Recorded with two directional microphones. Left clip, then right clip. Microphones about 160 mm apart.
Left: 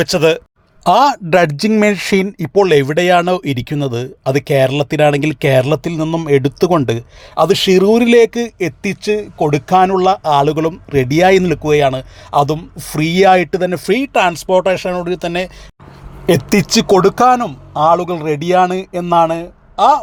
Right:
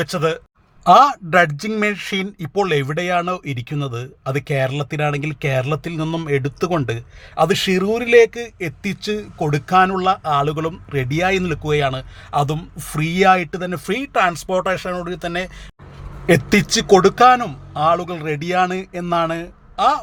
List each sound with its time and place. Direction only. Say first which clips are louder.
0.0 s speech: left 8 dB; 35° left (ahead or behind)
6.0 s speech: left 6 dB; 10° left (ahead or behind)
6.2 s speech: left 9 dB; 30° left (ahead or behind)
16.9 s speech: left 1 dB; 10° left (ahead or behind)
17.7 s speech: left 6 dB; 20° left (ahead or behind)